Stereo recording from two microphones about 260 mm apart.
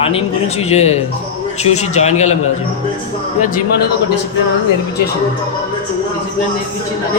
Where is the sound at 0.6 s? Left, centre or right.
Left.